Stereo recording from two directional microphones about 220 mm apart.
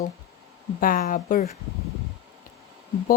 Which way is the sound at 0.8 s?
40° left (ahead or behind).